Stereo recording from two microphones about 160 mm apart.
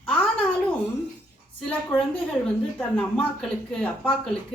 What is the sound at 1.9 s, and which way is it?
A woman's voice, 15° left (ahead or behind).